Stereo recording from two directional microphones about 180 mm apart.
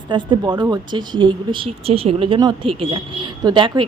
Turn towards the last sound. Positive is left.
turn(degrees=-25)  # may be behind; listen again after turning